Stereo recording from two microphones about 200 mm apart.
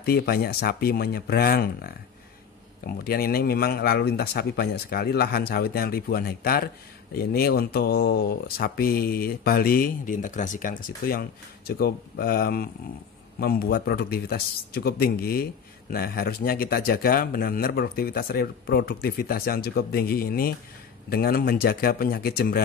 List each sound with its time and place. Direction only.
0.0 s speech: 50° left (ahead or behind)
2.9 s speech: 50° left (ahead or behind)